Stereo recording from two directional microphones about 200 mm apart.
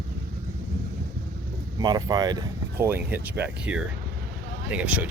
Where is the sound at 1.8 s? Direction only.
20° right (ahead or behind).